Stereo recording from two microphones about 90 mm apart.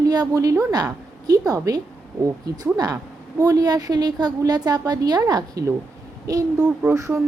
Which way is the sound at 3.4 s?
40° right (ahead or behind).